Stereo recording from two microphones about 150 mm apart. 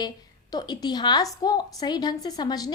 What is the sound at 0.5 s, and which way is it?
A woman's voice, 25° left (ahead or behind).